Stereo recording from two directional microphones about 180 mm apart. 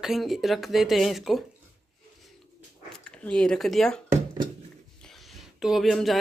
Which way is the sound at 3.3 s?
5° left (ahead or behind).